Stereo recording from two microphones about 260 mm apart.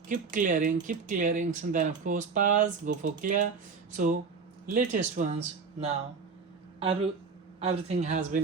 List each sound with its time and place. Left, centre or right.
0.1 s speech: right